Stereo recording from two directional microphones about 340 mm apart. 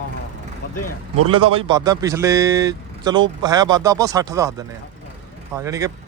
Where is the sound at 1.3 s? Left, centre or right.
Centre.